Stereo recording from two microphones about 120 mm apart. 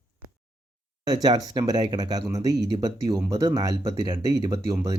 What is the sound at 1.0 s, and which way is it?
Speech, 35° right (ahead or behind).